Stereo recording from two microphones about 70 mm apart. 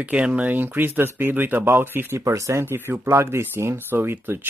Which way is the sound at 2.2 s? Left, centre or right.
Right.